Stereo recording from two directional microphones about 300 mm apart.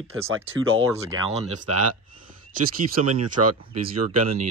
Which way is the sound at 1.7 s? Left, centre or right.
Right.